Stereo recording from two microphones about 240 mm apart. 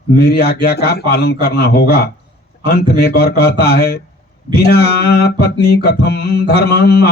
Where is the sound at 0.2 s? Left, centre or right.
Left.